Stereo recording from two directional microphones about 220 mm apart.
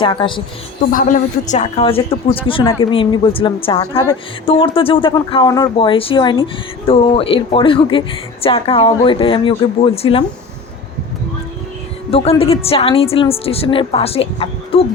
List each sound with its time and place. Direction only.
0.0 s speech: 20° left (ahead or behind)
0.9 s speech: 35° left (ahead or behind)
12.1 s speech: 25° left (ahead or behind)